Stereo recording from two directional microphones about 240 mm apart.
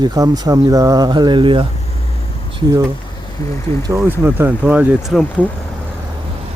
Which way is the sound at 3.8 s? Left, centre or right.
Centre.